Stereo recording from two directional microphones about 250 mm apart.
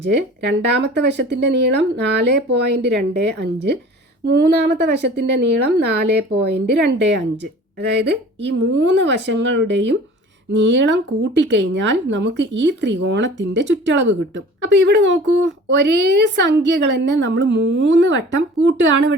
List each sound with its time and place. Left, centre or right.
0.0 s speech: right